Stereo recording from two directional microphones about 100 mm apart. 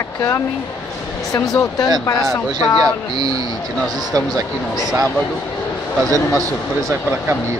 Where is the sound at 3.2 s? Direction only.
40° right (ahead or behind).